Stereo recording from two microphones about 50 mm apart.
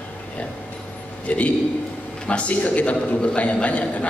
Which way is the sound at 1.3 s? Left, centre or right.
Left.